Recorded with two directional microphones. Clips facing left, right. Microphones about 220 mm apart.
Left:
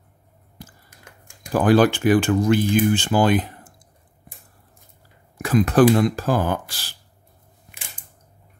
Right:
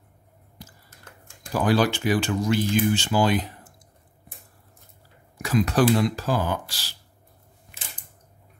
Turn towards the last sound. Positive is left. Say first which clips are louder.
# left 4 dB
turn(degrees=55)  # may be behind; listen again after turning